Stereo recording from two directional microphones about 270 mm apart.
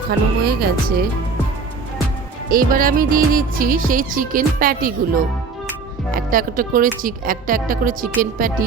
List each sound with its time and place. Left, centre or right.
0.4 s music: right
2.5 s music: right